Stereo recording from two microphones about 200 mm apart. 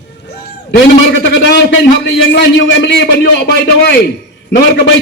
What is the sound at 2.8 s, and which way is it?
A man's voice, 55° left (ahead or behind).